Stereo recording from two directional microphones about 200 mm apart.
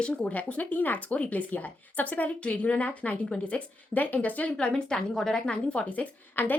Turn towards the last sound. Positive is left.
turn(degrees=10)  # may be behind; listen again after turning